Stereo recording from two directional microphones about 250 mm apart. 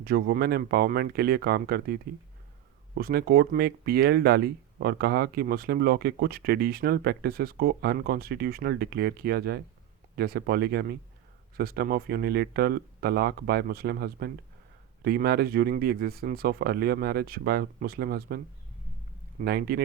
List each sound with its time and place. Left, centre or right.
0.0 s speech: right